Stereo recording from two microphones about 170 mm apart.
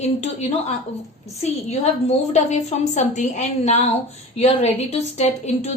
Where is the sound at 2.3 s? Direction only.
40° left (ahead or behind).